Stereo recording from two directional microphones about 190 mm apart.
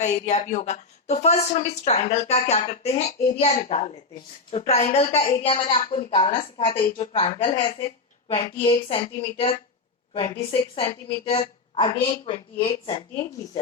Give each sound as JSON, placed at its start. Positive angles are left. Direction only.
{"t": 0.0, "sound": "a woman's voice", "side_deg": 35}